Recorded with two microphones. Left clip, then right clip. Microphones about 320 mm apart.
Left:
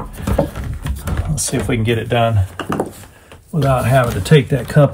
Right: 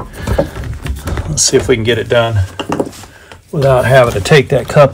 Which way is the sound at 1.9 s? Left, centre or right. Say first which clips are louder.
Right 6 dB; right.